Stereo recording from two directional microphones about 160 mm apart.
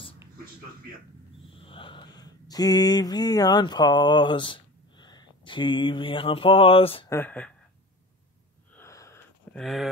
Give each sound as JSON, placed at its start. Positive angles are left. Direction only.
{"t": 1.6, "sound": "speech", "side_deg": 35}
{"t": 7.1, "sound": "speech", "side_deg": 10}
{"t": 8.7, "sound": "wheeze", "side_deg": 20}
{"t": 9.5, "sound": "speech", "side_deg": 0}